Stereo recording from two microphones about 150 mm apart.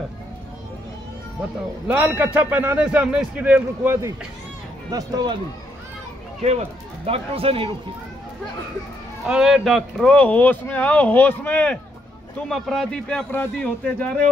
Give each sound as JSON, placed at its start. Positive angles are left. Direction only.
{"t": 1.9, "sound": "a man's voice", "side_deg": -10}
{"t": 4.9, "sound": "speech", "side_deg": -25}
{"t": 7.1, "sound": "speech", "side_deg": -40}
{"t": 9.2, "sound": "speech", "side_deg": -5}